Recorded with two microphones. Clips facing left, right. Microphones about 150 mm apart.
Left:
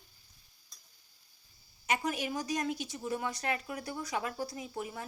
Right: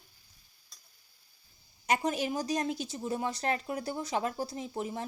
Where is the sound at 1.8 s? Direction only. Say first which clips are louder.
Right 4 dB; 35° right (ahead or behind).